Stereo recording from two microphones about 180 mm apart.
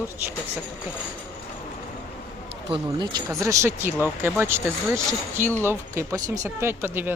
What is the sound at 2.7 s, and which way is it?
A woman's voice, 25° right (ahead or behind).